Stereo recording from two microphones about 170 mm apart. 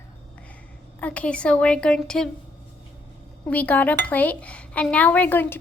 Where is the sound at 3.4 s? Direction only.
10° left (ahead or behind).